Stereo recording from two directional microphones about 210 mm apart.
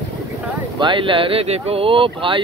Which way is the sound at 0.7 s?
20° right (ahead or behind).